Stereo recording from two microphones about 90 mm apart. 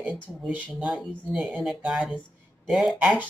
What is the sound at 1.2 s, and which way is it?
Speech, centre (ahead or behind).